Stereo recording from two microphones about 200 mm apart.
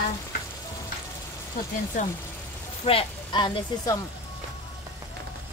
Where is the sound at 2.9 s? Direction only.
25° left (ahead or behind).